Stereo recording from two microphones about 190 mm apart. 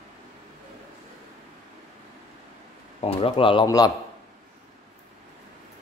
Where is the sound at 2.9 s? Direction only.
30° left (ahead or behind).